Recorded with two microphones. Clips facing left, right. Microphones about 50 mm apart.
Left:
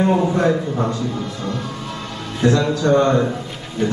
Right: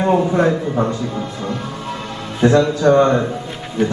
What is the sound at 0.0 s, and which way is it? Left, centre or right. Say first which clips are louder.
Speech: right 2 dB; right.